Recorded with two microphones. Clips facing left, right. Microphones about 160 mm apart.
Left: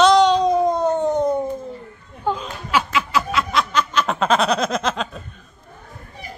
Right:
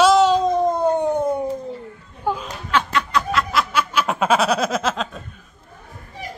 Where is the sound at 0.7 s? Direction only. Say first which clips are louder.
Even; 10° right (ahead or behind).